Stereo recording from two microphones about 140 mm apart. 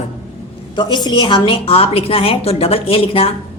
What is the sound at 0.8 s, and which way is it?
A woman's voice, 35° left (ahead or behind).